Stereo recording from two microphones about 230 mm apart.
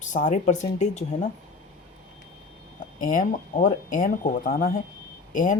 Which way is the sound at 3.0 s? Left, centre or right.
Left.